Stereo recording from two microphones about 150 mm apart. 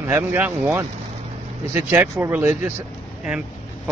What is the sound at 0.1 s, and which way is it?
Speech, 10° right (ahead or behind).